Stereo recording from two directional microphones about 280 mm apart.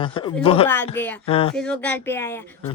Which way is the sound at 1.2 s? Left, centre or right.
Left.